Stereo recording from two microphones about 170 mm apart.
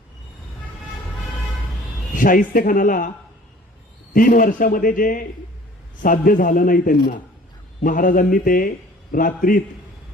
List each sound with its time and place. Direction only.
2.1 s a man's voice: 55° left (ahead or behind)
4.1 s a man's voice: 55° left (ahead or behind)